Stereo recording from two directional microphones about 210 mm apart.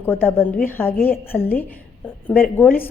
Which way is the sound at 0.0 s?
10° left (ahead or behind).